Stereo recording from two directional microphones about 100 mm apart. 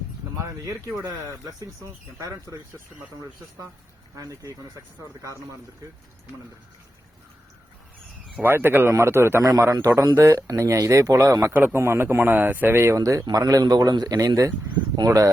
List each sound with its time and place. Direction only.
0.3 s a sound: 35° right (ahead or behind)
0.9 s speech: 10° right (ahead or behind)
1.5 s a man's voice: 35° right (ahead or behind)
4.1 s a man's voice: 30° right (ahead or behind)
8.4 s a man's voice: 25° right (ahead or behind)
11.5 s a man's voice: 20° right (ahead or behind); by 15.3 s 40° right (ahead or behind)